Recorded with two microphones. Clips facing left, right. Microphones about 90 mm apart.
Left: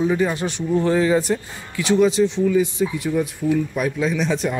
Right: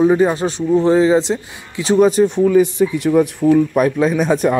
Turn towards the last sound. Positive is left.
turn(degrees=-50)  # may be behind; listen again after turning